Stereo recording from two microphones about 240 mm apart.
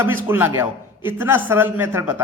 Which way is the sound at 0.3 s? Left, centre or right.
Centre.